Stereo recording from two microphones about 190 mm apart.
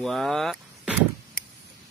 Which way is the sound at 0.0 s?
Centre (ahead or behind).